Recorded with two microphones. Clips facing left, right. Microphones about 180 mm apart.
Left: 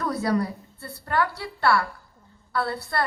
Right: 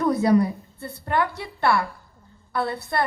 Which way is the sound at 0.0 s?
20° right (ahead or behind).